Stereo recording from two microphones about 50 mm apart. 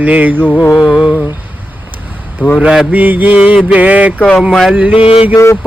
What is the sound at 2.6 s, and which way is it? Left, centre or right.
Mantra, centre.